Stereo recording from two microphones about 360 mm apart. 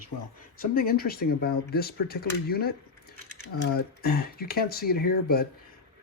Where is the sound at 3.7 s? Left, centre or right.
Left.